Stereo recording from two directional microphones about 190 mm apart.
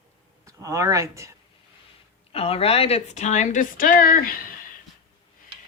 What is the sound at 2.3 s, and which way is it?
Speech, 30° left (ahead or behind).